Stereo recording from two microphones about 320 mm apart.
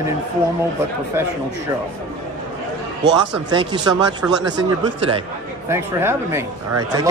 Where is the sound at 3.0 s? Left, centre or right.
Right.